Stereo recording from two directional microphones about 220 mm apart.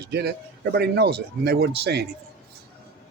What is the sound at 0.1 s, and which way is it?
Speech, 50° right (ahead or behind).